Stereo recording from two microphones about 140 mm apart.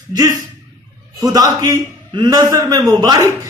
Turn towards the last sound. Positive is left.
turn(degrees=-30)  # may be behind; listen again after turning